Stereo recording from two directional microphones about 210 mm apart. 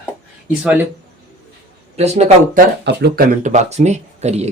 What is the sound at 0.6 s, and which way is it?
Speech, 5° right (ahead or behind).